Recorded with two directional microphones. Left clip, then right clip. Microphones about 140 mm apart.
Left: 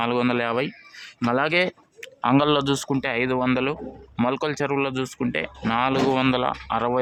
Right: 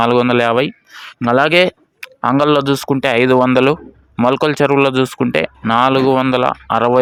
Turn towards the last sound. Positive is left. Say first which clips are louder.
# right 10 dB
turn(degrees=-45)  # may be behind; listen again after turning